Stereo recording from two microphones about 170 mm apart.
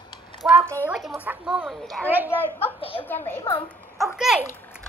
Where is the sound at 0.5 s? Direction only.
15° right (ahead or behind).